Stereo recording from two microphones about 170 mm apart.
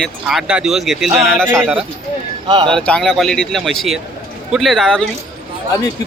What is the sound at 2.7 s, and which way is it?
Speech, 5° left (ahead or behind).